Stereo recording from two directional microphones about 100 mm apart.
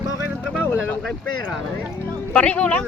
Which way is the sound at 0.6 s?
20° left (ahead or behind).